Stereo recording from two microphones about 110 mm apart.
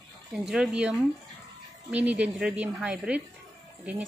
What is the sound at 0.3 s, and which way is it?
Speech, 5° right (ahead or behind).